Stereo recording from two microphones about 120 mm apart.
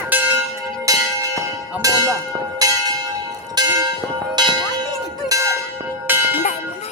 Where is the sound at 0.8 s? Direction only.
30° right (ahead or behind).